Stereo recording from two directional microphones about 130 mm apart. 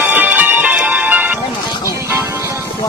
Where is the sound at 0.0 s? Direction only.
15° right (ahead or behind).